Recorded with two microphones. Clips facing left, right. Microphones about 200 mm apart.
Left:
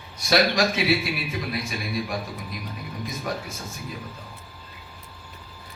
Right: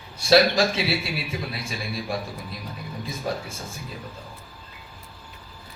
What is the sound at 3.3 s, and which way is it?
Speech, 30° right (ahead or behind).